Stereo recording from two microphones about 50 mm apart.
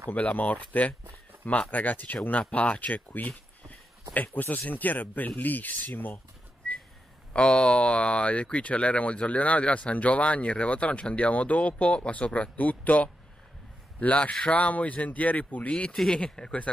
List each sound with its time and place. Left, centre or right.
0.1 s speech: left
7.3 s a man's voice: centre; by 15.7 s left
15.7 s speech: centre